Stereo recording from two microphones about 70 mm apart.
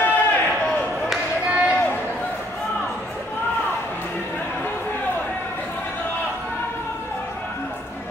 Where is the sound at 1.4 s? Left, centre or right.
Right.